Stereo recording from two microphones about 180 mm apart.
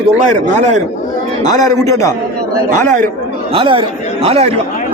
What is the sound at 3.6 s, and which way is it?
Speech, 30° right (ahead or behind).